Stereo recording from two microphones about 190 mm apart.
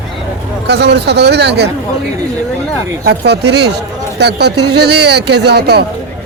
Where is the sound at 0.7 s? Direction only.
65° right (ahead or behind).